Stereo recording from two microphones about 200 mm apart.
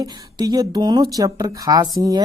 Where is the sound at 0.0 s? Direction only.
20° right (ahead or behind).